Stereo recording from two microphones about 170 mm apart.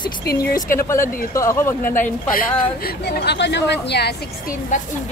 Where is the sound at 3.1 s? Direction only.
85° left.